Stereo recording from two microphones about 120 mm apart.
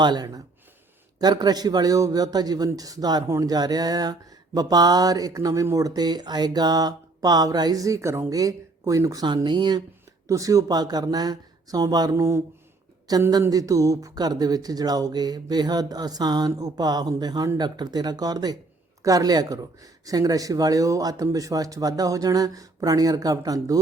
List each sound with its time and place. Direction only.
0.0 s speech: 35° right (ahead or behind)
9.2 s speech: 40° right (ahead or behind)
10.2 s speech: 25° right (ahead or behind)